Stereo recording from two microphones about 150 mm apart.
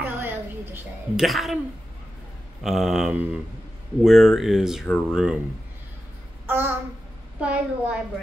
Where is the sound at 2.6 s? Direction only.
Centre (ahead or behind).